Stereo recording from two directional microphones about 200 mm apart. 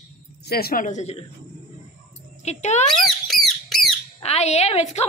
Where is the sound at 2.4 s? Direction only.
35° left (ahead or behind).